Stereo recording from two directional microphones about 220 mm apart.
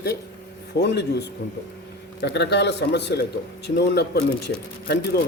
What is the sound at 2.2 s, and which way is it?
Speech, 50° left (ahead or behind).